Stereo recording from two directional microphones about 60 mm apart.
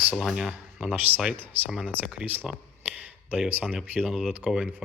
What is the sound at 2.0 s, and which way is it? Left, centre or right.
Speech, centre.